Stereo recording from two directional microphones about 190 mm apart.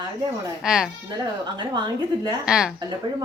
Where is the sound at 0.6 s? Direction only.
5° right (ahead or behind).